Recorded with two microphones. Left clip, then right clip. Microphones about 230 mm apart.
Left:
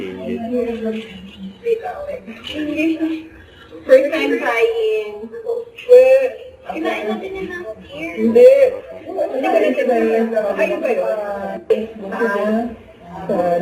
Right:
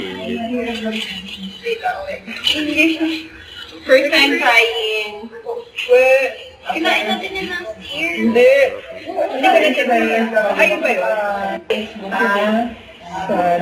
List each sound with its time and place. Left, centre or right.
0.0 s music: centre
0.3 s a woman's voice: centre
5.9 s a man's voice: centre